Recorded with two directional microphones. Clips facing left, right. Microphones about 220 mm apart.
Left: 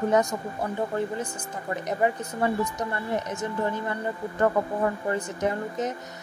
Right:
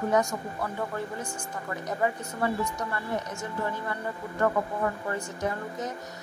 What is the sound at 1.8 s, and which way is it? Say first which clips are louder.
Speech: left 3 dB; 20° left (ahead or behind).